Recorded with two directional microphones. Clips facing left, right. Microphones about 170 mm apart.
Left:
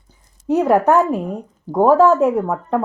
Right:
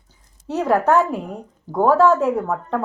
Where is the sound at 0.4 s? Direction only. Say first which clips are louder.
Left 4 dB; 15° left (ahead or behind).